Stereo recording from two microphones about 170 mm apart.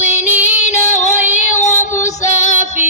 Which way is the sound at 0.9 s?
45° left (ahead or behind).